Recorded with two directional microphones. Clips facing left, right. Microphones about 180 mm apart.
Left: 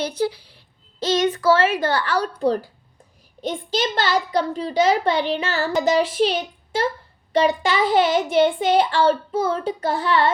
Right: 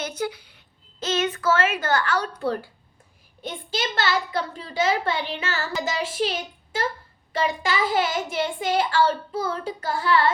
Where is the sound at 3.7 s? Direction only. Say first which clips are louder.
Left 3 dB; 40° left (ahead or behind).